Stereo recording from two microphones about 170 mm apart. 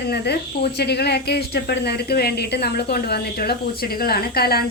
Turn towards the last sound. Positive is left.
turn(degrees=65)  # may be behind; listen again after turning